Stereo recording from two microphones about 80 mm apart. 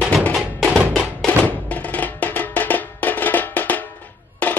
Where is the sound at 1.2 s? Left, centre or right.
Centre.